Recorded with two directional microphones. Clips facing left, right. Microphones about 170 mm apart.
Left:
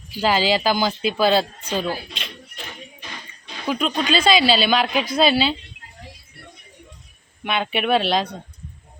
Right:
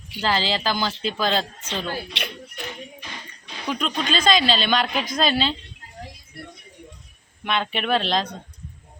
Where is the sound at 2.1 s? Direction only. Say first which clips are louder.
Right 4 dB; 75° right (ahead or behind).